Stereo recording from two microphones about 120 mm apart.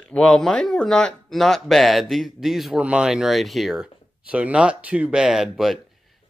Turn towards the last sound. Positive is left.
turn(degrees=-5)  # may be behind; listen again after turning